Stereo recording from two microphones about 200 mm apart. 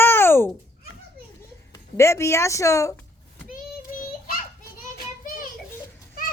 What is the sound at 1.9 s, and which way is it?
Speech, 15° left (ahead or behind).